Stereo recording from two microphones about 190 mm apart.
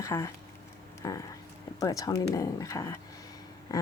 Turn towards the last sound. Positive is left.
turn(degrees=20)  # may be behind; listen again after turning